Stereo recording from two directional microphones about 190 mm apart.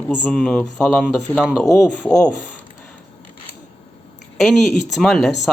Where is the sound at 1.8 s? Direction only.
5° left (ahead or behind).